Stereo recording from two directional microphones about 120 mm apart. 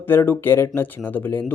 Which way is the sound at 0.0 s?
20° left (ahead or behind).